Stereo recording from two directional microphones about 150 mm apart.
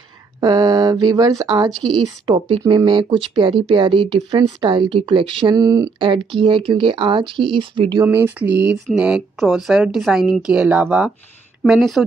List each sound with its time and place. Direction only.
0.4 s speech: 25° right (ahead or behind)
1.7 s speech: 5° left (ahead or behind)
2.0 s speech: 35° right (ahead or behind)
5.6 s speech: 25° right (ahead or behind)
6.0 s speech: 35° right (ahead or behind)
8.0 s speech: 15° right (ahead or behind)